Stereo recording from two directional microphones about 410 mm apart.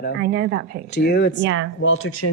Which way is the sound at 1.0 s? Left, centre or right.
Left.